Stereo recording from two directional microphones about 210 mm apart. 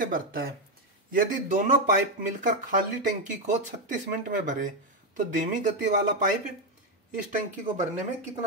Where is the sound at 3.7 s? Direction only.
40° right (ahead or behind).